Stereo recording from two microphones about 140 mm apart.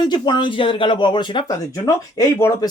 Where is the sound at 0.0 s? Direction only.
30° left (ahead or behind).